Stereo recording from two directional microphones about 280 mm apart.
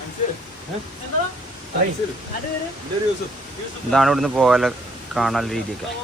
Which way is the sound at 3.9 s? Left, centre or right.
Centre.